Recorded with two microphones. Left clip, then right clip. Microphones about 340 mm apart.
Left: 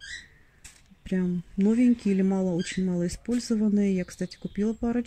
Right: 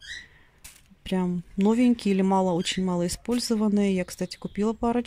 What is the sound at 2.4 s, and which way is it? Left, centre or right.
Speech, right.